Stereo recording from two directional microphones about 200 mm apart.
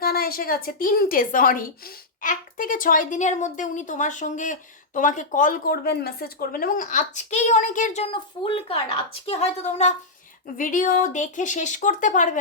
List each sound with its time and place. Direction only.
0.0 s a woman's voice: 50° left (ahead or behind)